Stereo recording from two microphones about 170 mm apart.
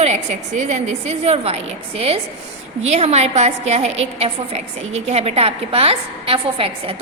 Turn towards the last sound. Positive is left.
turn(degrees=-30)  # may be behind; listen again after turning